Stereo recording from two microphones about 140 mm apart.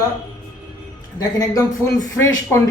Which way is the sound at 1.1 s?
25° left (ahead or behind).